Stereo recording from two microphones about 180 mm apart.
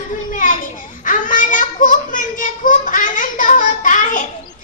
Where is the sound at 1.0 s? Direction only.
45° left (ahead or behind).